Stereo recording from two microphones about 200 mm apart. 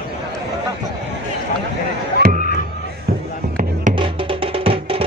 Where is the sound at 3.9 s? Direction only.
25° right (ahead or behind).